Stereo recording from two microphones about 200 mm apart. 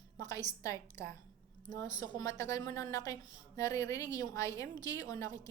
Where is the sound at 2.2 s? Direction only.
15° left (ahead or behind).